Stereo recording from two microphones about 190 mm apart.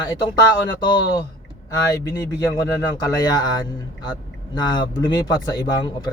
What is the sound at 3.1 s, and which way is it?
Speech, 20° left (ahead or behind).